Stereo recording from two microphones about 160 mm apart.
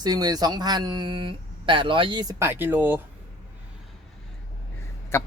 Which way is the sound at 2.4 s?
15° right (ahead or behind).